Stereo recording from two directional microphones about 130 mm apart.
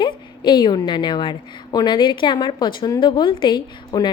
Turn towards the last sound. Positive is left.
turn(degrees=35)  # may be behind; listen again after turning